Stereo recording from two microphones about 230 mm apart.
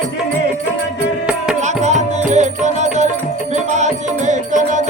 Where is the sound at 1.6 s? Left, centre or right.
Right.